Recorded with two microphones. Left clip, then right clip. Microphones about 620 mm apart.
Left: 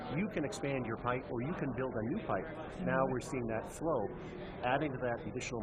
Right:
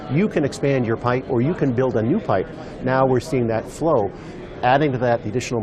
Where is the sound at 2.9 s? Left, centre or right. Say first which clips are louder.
Right 16 dB; right.